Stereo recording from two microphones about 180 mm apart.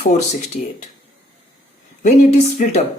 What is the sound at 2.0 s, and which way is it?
Speech, 40° left (ahead or behind).